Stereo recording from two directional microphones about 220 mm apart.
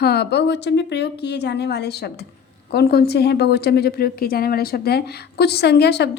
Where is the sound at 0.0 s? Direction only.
45° left (ahead or behind).